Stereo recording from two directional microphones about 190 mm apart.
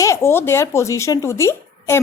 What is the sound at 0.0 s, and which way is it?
A woman's voice, 15° left (ahead or behind).